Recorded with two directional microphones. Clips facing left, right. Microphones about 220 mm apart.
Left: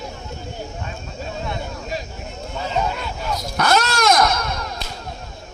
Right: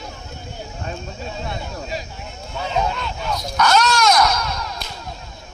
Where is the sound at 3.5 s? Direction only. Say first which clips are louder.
Right 2 dB; 55° left (ahead or behind).